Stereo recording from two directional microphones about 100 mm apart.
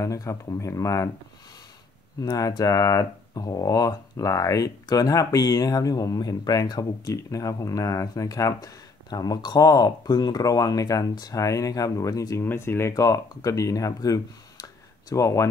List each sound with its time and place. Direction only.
0.0 s speech: 35° left (ahead or behind)
2.2 s speech: 40° left (ahead or behind)
12.4 s speech: 25° left (ahead or behind)